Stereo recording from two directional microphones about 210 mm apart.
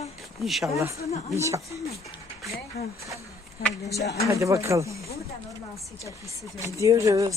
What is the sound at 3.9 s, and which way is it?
Speech, 55° left (ahead or behind).